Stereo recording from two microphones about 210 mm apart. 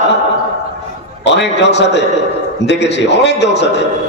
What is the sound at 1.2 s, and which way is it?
A man's voice, 55° left (ahead or behind).